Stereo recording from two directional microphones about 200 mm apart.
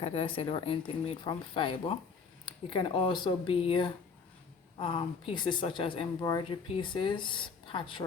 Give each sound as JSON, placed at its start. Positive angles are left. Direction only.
{"t": 0.0, "sound": "speech", "side_deg": 30}